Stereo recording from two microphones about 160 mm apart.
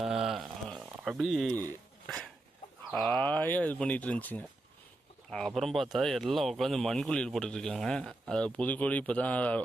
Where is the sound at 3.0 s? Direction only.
Centre (ahead or behind).